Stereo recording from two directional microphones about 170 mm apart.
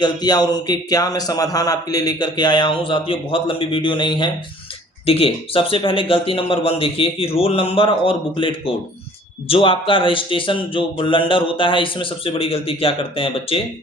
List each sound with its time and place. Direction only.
0.0 s a man's voice: 25° left (ahead or behind)